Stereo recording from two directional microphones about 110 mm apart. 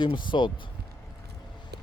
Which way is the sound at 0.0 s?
45° left (ahead or behind).